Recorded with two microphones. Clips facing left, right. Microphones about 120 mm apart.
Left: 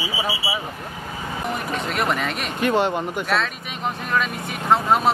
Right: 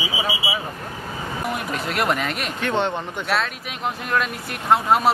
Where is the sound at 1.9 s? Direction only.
Centre (ahead or behind).